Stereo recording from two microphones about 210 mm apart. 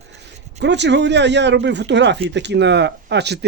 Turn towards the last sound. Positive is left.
turn(degrees=-55)  # may be behind; listen again after turning